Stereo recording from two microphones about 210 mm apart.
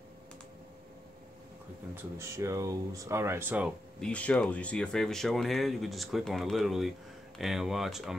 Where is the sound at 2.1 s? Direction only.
15° right (ahead or behind).